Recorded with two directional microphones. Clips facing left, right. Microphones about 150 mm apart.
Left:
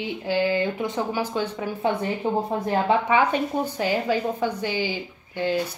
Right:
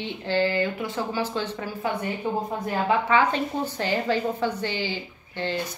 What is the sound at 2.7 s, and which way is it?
A woman's voice, 15° left (ahead or behind).